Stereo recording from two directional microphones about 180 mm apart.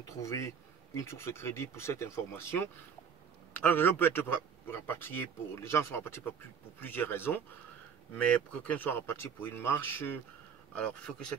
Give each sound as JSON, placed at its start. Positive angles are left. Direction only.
{"t": 0.2, "sound": "speech", "side_deg": 15}